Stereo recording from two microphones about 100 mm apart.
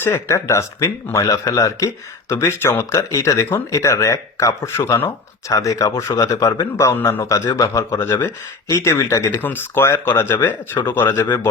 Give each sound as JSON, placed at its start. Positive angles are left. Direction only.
{"t": 0.0, "sound": "speech", "side_deg": 25}